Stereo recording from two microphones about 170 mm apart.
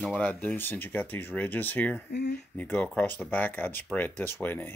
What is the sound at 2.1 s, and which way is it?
Speech, 70° left (ahead or behind).